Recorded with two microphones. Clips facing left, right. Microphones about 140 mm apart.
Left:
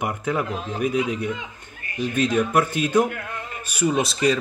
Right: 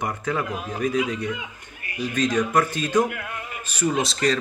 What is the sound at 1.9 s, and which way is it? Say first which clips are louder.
Speech: left 2 dB; 30° left (ahead or behind).